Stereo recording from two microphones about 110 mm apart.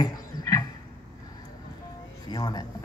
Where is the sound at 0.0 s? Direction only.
35° left (ahead or behind).